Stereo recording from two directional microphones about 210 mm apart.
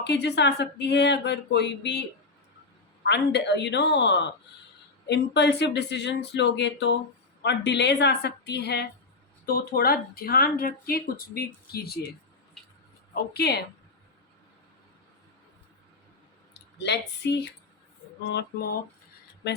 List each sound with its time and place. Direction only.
0.0 s speech: 55° left (ahead or behind)
13.3 s speech: 50° left (ahead or behind)
16.6 s speech: 55° left (ahead or behind)